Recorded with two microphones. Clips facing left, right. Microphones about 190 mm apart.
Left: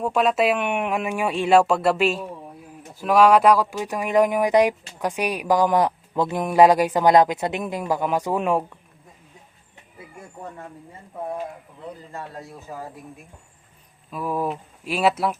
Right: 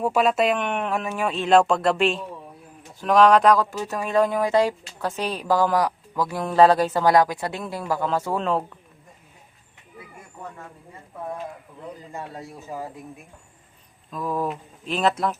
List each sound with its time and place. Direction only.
0.0 s speech: centre (ahead or behind); by 8.6 s 15° left (ahead or behind)
14.1 s speech: 10° left (ahead or behind)